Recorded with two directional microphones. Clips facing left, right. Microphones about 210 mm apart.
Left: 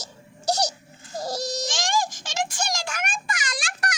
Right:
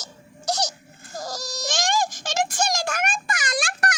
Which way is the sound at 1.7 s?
60° right (ahead or behind).